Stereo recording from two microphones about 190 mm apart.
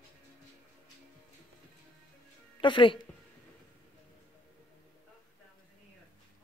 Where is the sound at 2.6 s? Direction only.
25° left (ahead or behind).